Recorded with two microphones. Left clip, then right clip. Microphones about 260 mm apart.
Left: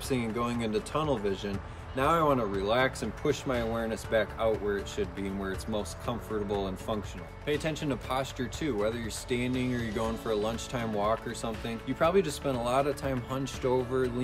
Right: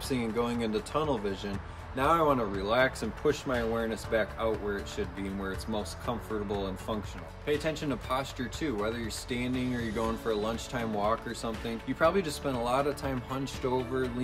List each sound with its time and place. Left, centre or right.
0.1 s speech: centre